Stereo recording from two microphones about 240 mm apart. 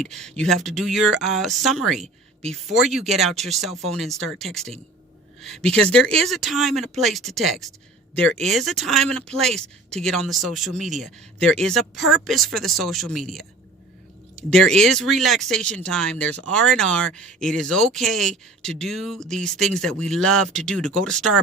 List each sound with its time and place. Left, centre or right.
0.0 s speech: centre